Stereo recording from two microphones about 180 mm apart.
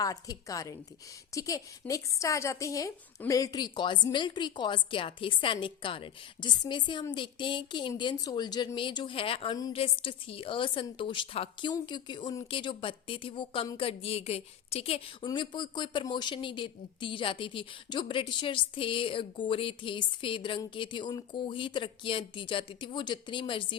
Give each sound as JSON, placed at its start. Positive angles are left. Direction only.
{"t": 0.0, "sound": "speech", "side_deg": 20}